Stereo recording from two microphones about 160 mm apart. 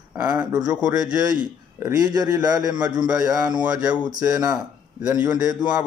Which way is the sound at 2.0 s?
25° right (ahead or behind).